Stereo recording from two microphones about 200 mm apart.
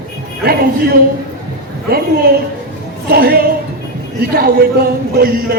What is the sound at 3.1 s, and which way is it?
Music, 50° right (ahead or behind).